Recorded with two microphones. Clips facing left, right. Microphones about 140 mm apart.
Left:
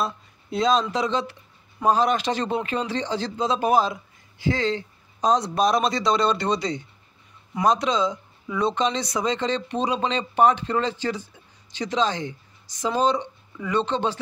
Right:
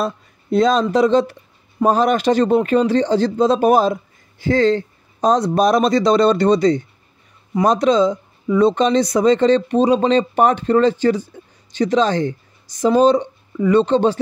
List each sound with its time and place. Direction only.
0.0 s speech: 55° right (ahead or behind)